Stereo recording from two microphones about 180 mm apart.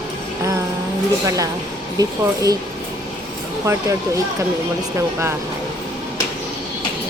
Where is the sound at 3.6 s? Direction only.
15° right (ahead or behind).